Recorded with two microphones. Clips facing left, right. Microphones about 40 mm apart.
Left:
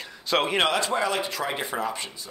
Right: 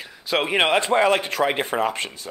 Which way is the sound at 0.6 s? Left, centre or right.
Right.